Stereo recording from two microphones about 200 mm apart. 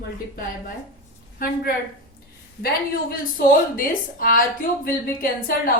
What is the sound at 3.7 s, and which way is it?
Speech, 45° left (ahead or behind).